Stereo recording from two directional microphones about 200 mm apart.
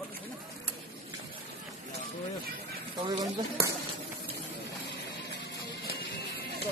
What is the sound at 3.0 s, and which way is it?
Speech, 25° right (ahead or behind).